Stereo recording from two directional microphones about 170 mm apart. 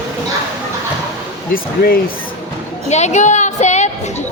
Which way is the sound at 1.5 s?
60° left (ahead or behind).